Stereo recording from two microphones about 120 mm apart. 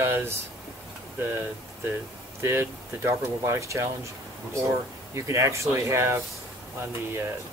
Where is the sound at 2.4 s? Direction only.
20° right (ahead or behind).